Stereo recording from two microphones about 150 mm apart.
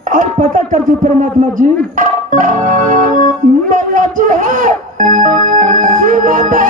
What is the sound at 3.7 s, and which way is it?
Music, 60° right (ahead or behind).